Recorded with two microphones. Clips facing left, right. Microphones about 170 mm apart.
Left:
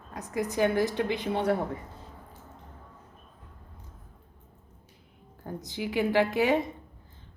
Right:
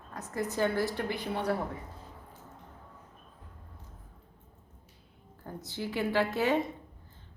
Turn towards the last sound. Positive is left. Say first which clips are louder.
# left 3 dB
turn(degrees=15)  # may be behind; listen again after turning